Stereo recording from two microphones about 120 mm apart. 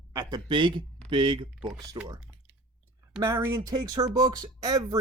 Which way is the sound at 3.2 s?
20° right (ahead or behind).